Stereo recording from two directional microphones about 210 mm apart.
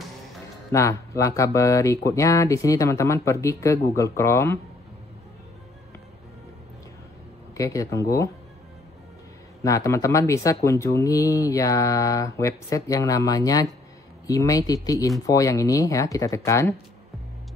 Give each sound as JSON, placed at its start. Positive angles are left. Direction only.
{"t": 0.7, "sound": "speech", "side_deg": 15}
{"t": 7.5, "sound": "speech", "side_deg": 15}
{"t": 9.6, "sound": "speech", "side_deg": 15}